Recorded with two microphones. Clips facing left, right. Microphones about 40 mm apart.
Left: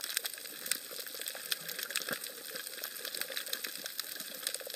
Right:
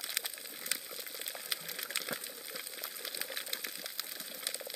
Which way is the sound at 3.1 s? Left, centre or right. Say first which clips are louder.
Left 1 dB; centre.